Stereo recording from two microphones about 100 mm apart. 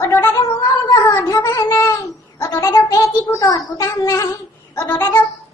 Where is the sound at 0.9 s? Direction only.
30° left (ahead or behind).